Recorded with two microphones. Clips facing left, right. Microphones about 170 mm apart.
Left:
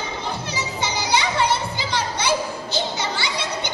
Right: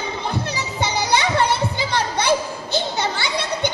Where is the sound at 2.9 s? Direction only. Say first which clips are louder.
Right 3 dB; 55° right (ahead or behind).